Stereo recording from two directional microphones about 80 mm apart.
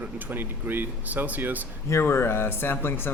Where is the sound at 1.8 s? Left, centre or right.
Left.